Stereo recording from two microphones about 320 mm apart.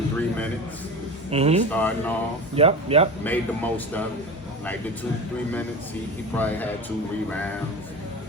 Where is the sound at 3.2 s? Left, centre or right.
Centre.